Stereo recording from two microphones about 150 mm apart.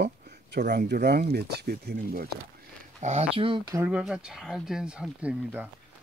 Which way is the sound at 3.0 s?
45° right (ahead or behind).